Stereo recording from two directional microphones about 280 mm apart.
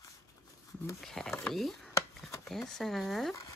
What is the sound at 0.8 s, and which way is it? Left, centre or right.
Speech, centre.